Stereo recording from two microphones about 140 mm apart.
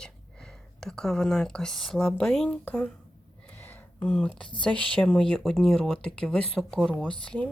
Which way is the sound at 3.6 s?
15° left (ahead or behind).